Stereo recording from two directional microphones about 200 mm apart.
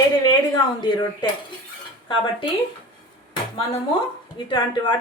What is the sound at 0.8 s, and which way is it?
Speech, 20° left (ahead or behind).